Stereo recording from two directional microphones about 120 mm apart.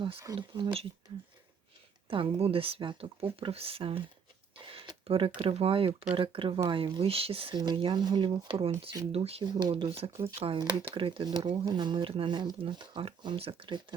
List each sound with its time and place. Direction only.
0.3 s speech: 50° right (ahead or behind)
2.0 s speech: 50° right (ahead or behind)
4.5 s a sound: 45° right (ahead or behind)
5.4 s speech: 50° right (ahead or behind)
7.5 s speech: 35° right (ahead or behind)
9.1 s speech: 55° right (ahead or behind)
9.4 s speech: 35° right (ahead or behind)